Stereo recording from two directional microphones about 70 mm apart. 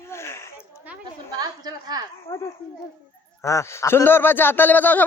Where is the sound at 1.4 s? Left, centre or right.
Right.